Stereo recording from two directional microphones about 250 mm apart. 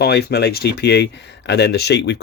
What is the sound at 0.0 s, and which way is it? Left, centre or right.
Speech, left.